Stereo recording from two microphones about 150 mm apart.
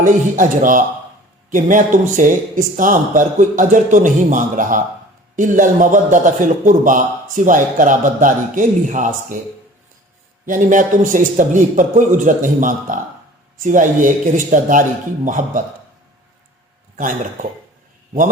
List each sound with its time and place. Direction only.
0.0 s a man's voice: 60° right (ahead or behind)
10.4 s a man's voice: 60° right (ahead or behind)
17.0 s a man's voice: 60° right (ahead or behind)